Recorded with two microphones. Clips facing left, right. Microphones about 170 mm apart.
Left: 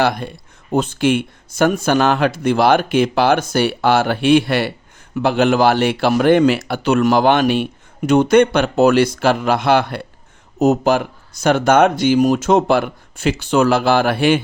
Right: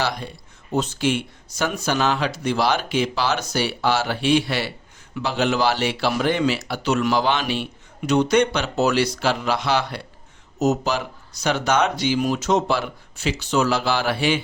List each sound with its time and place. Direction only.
0.0 s speech: 55° left (ahead or behind)